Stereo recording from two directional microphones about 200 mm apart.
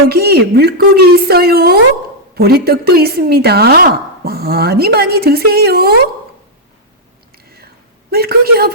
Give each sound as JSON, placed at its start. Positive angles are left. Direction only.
{"t": 0.1, "sound": "a woman's voice", "side_deg": -50}
{"t": 8.1, "sound": "a woman's voice", "side_deg": -50}